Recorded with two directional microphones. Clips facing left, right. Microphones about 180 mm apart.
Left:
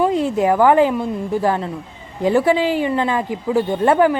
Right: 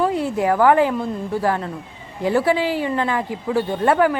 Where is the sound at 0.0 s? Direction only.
20° left (ahead or behind).